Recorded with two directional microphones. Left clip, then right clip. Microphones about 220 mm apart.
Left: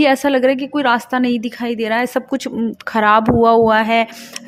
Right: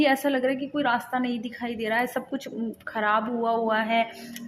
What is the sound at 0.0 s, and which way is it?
A woman's voice, 40° left (ahead or behind).